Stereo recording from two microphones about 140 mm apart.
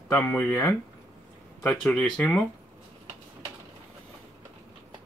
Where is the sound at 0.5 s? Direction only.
20° left (ahead or behind).